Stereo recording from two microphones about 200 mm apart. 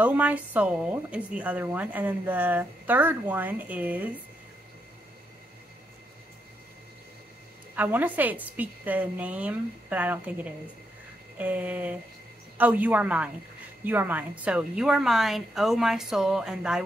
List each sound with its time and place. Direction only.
0.0 s a woman's voice: 5° right (ahead or behind)
7.7 s a woman's voice: 10° right (ahead or behind)